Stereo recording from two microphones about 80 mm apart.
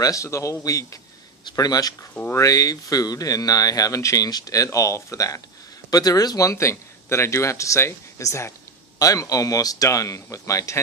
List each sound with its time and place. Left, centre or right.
0.0 s speech: left
1.5 s speech: left